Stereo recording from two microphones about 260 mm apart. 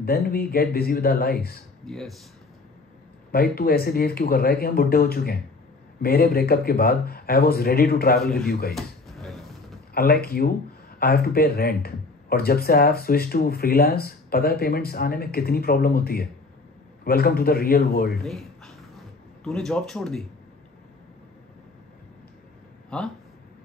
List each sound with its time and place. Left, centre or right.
0.0 s speech: left
1.9 s speech: centre
3.3 s speech: left
8.7 s a sound: centre
9.9 s speech: left
18.2 s a sound: centre
19.4 s speech: centre
22.8 s speech: centre